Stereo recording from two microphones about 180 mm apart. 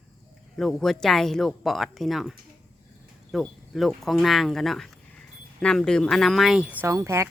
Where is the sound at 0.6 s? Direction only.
Centre (ahead or behind).